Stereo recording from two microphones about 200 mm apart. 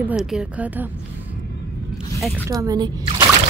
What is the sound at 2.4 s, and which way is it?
Speech, 15° right (ahead or behind).